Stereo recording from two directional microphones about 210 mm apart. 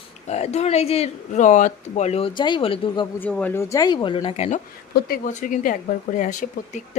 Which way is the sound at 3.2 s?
5° left (ahead or behind).